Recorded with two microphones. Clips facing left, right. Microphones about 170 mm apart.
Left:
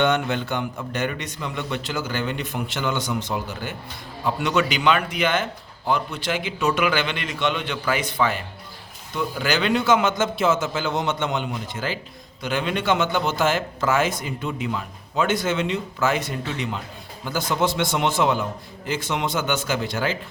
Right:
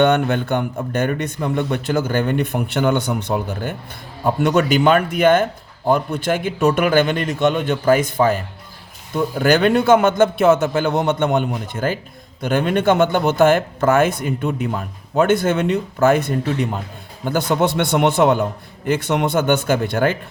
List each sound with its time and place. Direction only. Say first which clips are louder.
0.0 s speech: right 6 dB; 50° right (ahead or behind)